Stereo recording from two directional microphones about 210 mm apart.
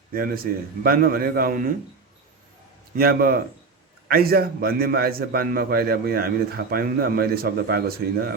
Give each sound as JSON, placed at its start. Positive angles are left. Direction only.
{"t": 0.1, "sound": "a man's voice", "side_deg": -45}
{"t": 2.9, "sound": "a man's voice", "side_deg": -45}